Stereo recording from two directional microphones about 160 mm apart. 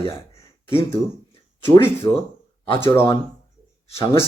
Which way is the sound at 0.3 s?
15° left (ahead or behind).